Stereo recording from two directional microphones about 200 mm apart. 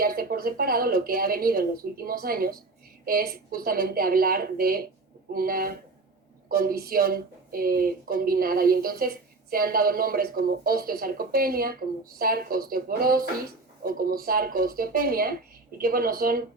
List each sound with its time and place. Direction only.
0.0 s a woman's voice: 50° right (ahead or behind)